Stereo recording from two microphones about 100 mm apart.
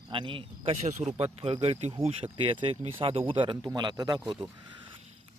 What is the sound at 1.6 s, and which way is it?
Speech, 75° right (ahead or behind).